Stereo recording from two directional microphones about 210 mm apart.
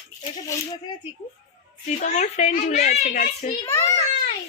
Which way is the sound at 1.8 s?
35° left (ahead or behind).